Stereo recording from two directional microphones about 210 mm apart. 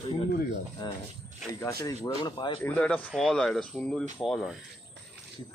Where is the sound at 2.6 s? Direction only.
5° left (ahead or behind).